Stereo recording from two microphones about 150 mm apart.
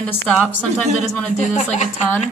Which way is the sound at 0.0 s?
5° left (ahead or behind).